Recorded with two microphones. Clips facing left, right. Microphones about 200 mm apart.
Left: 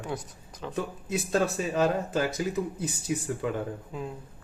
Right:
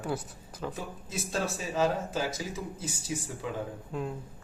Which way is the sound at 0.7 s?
60° left (ahead or behind).